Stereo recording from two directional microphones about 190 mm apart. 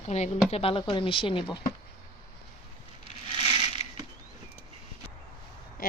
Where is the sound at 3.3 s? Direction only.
25° right (ahead or behind).